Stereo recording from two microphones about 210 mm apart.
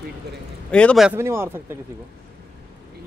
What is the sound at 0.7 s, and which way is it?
Speech, 5° left (ahead or behind).